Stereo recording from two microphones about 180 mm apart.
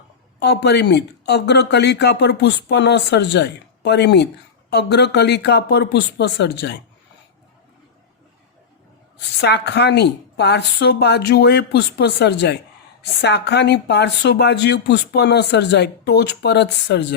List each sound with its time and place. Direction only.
0.3 s speech: 70° left (ahead or behind)
9.4 s speech: 70° left (ahead or behind)